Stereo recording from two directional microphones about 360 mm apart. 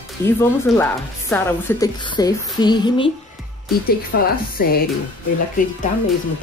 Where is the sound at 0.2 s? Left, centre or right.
Centre.